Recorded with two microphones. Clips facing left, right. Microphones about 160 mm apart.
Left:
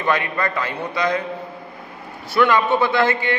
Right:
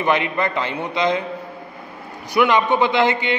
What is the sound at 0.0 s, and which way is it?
A man's voice, 20° right (ahead or behind).